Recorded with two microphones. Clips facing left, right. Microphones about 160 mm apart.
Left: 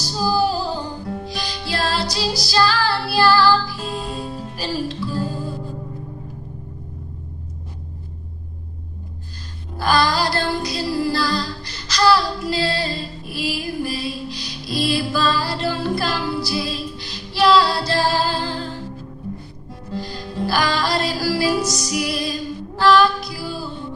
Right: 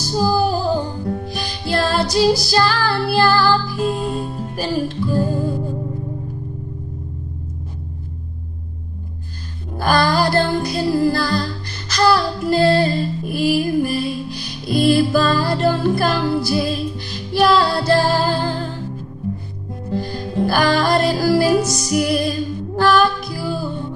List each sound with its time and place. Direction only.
0.0 s music: 50° right (ahead or behind)
9.8 s music: 50° right (ahead or behind)
19.9 s music: 50° right (ahead or behind)